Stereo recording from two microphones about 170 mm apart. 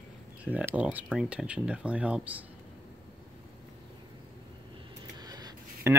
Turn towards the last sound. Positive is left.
turn(degrees=-25)  # may be behind; listen again after turning